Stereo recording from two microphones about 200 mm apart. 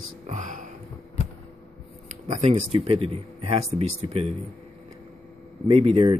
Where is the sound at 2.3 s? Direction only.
30° right (ahead or behind).